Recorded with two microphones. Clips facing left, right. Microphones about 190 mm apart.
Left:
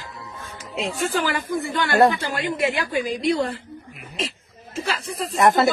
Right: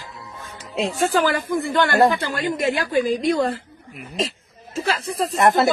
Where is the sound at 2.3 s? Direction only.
45° right (ahead or behind).